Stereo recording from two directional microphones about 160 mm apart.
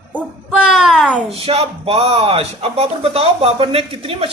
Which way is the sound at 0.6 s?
5° right (ahead or behind).